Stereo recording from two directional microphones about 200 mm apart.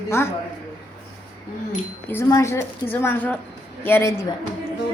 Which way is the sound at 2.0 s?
10° left (ahead or behind).